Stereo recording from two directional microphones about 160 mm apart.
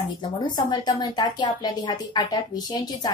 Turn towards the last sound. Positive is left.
turn(degrees=25)  # may be behind; listen again after turning